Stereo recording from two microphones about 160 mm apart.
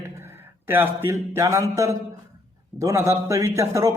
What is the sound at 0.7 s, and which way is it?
A man's voice, 15° right (ahead or behind).